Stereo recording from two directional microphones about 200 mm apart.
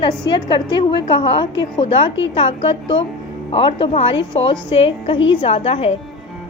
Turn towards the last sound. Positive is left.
turn(degrees=30)  # may be behind; listen again after turning